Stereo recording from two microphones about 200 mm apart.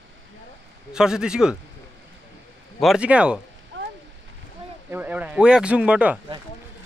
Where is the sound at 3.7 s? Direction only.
70° right (ahead or behind).